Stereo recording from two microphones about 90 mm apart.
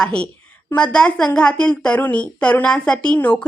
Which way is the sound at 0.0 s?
10° left (ahead or behind).